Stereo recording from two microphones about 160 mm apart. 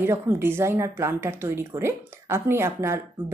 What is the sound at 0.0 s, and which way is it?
A woman's voice, 15° right (ahead or behind).